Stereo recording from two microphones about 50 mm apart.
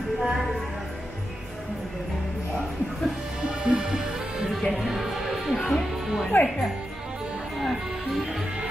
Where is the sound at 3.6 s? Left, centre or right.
Centre.